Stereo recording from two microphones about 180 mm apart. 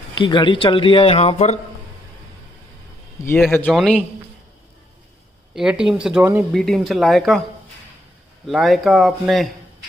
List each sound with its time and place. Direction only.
0.1 s speech: 25° left (ahead or behind)
3.2 s speech: 20° left (ahead or behind)
3.7 s speech: 5° left (ahead or behind)
5.5 s speech: 5° right (ahead or behind)
8.5 s speech: centre (ahead or behind)